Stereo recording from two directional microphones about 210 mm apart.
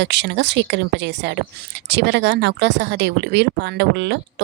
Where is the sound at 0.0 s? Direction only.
55° right (ahead or behind).